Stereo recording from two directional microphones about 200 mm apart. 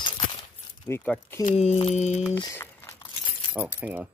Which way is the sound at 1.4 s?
30° left (ahead or behind).